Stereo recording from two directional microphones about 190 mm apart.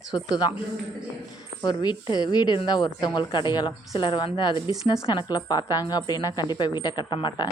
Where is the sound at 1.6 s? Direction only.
20° left (ahead or behind).